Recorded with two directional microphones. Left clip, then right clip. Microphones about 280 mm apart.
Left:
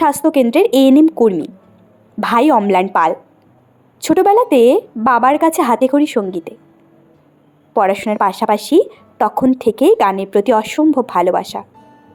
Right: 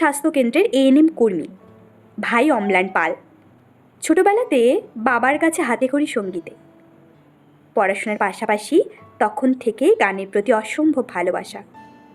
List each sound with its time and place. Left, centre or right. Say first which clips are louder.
0.0 s speech: left 5 dB; centre
7.7 s speech: left 5 dB; centre